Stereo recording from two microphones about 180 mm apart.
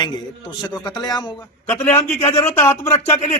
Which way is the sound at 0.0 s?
25° left (ahead or behind).